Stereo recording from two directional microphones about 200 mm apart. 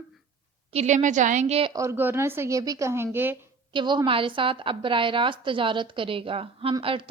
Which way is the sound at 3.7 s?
25° right (ahead or behind).